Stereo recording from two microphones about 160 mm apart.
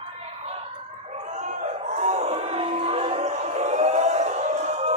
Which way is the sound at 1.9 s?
45° right (ahead or behind).